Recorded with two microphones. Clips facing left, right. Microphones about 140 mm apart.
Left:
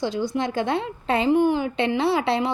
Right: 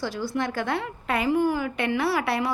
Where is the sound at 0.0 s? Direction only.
20° left (ahead or behind).